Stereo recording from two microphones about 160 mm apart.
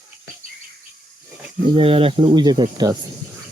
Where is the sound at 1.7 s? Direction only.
35° right (ahead or behind).